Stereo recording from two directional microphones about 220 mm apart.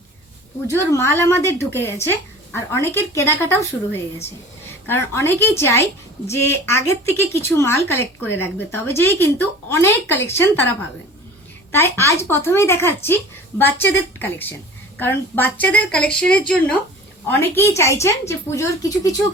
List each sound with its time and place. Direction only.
0.7 s a woman's voice: 10° left (ahead or behind)
11.7 s speech: 10° left (ahead or behind)